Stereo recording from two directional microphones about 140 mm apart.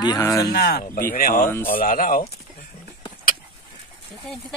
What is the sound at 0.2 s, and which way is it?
Speech, 25° left (ahead or behind).